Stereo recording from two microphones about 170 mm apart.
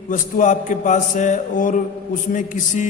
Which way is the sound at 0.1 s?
50° left (ahead or behind).